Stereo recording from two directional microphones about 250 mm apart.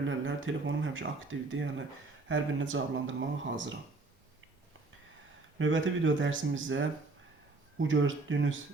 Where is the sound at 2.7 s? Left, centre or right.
Right.